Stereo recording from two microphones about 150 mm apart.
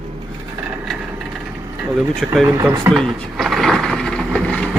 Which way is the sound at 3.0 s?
Centre (ahead or behind).